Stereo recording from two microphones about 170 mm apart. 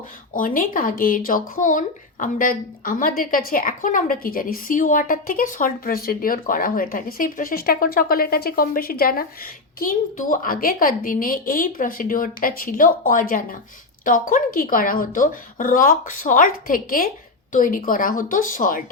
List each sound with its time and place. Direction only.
0.3 s a woman's voice: 55° left (ahead or behind)